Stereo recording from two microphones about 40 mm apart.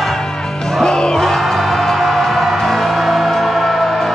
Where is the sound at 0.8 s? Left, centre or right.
Centre.